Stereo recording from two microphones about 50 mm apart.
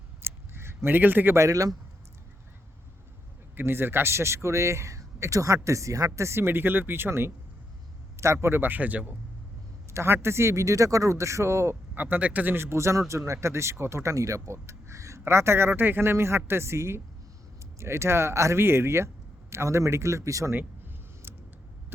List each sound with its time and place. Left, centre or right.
0.2 s a sound: right
0.9 s speech: right
3.5 s a man's voice: right
6.1 s speech: right
8.1 s speech: right
9.9 s speech: right
11.9 s speech: right
12.5 s speech: right
15.2 s a man's voice: right
18.6 s speech: right
20.5 s a sound: right